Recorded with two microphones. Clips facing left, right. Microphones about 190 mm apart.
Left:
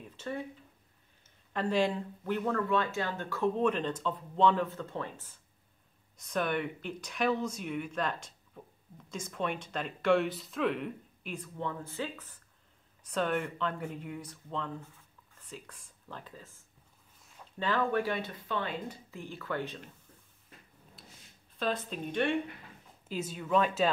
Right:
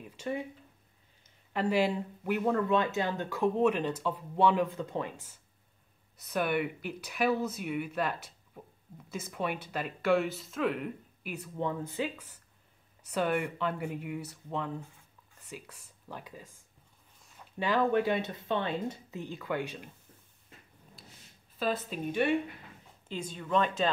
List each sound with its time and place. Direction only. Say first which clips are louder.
0.0 s a sound: right 3 dB; 10° right (ahead or behind)
1.5 s speech: right 1 dB; 10° right (ahead or behind)
21.5 s speech: right 1 dB; 5° right (ahead or behind)
23.0 s speech: left 2 dB; 5° left (ahead or behind)